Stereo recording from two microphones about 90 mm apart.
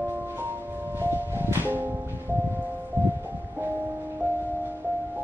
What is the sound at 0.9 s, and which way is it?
Music, 25° right (ahead or behind).